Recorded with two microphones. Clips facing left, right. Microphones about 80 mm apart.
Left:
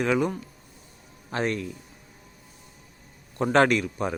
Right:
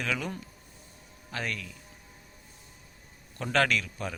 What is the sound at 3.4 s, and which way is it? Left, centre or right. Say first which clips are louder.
Speech: left 7 dB; left.